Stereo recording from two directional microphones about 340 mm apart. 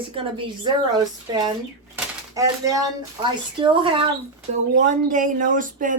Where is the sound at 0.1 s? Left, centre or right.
Centre.